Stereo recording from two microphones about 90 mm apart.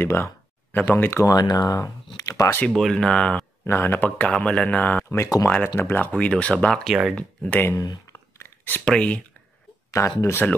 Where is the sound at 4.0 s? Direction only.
15° left (ahead or behind).